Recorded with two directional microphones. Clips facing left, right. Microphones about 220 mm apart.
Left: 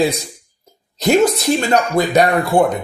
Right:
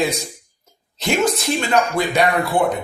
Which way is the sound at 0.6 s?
40° left (ahead or behind).